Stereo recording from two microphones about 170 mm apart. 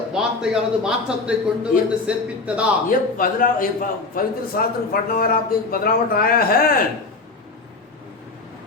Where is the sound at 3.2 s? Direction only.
55° left (ahead or behind).